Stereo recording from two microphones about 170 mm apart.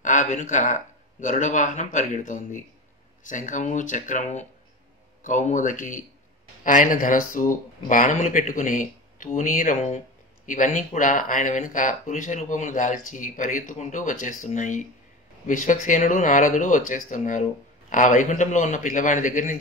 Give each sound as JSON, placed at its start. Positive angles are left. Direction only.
{"t": 0.0, "sound": "speech", "side_deg": 50}